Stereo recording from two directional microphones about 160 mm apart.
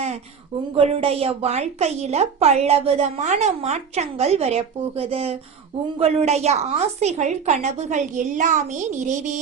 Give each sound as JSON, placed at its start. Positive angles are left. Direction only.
{"t": 0.8, "sound": "a woman's voice", "side_deg": -40}